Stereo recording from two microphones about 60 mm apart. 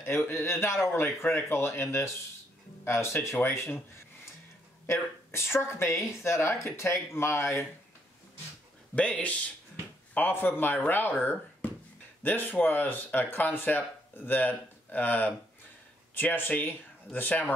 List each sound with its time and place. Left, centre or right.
0.3 s speech: left
4.8 s speech: left
8.9 s speech: left